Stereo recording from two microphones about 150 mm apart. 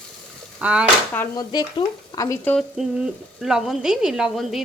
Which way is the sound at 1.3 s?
25° left (ahead or behind).